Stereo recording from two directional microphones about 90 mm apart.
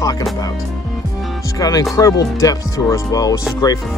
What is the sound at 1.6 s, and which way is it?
Speech, 40° left (ahead or behind).